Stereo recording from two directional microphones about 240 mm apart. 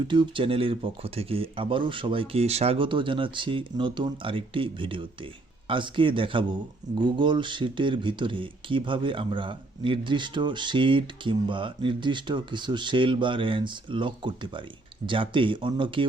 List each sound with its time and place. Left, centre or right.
0.1 s speech: centre